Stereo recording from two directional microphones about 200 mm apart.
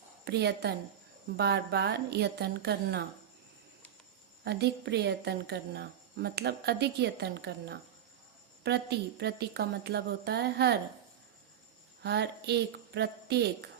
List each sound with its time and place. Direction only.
0.3 s a woman's voice: 55° right (ahead or behind)
4.4 s a woman's voice: 55° right (ahead or behind)
12.0 s a woman's voice: 55° right (ahead or behind)